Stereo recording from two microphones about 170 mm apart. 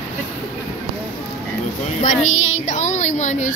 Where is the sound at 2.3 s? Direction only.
45° left (ahead or behind).